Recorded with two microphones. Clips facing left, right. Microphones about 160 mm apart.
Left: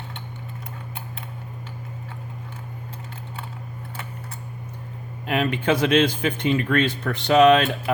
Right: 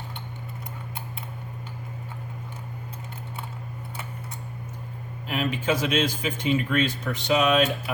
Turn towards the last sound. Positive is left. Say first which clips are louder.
# left 6 dB
turn(degrees=60)  # may be behind; listen again after turning